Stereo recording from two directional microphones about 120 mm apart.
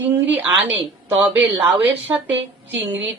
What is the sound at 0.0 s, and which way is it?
Speech, 15° right (ahead or behind).